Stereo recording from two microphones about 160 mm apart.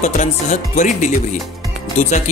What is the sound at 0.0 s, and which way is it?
Speech, 50° left (ahead or behind).